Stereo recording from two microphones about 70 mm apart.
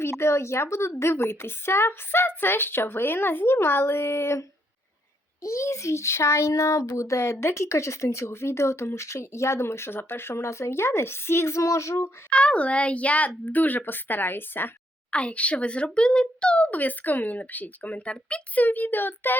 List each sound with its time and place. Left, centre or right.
0.0 s a woman's voice: left
5.4 s a child's voice: left
12.3 s a child's voice: centre
15.1 s a child's voice: centre